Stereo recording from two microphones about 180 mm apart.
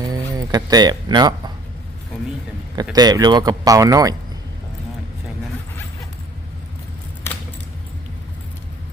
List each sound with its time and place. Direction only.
0.1 s a sound: 20° right (ahead or behind)
2.9 s speech: 20° right (ahead or behind)
7.3 s keys jangling: 10° left (ahead or behind)